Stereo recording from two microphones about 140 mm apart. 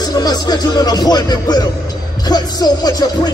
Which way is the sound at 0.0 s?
30° left (ahead or behind).